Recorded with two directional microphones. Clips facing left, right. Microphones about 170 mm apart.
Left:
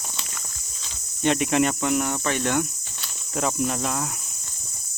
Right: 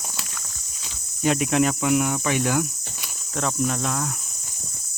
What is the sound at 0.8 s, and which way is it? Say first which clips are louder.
Speech: even; 5° right (ahead or behind).